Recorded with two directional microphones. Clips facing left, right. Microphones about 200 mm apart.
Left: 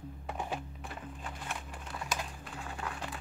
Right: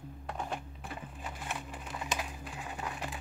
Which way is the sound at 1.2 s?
5° right (ahead or behind).